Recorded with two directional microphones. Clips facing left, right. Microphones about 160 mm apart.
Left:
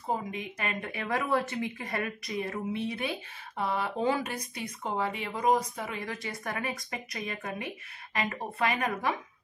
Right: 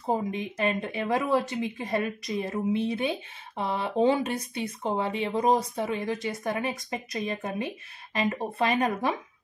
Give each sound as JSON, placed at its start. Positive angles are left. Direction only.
{"t": 0.1, "sound": "speech", "side_deg": -30}